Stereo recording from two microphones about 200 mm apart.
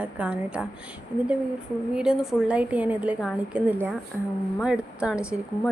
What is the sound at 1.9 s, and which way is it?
A woman's voice, 5° right (ahead or behind).